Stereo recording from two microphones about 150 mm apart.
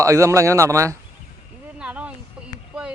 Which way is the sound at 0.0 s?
20° right (ahead or behind).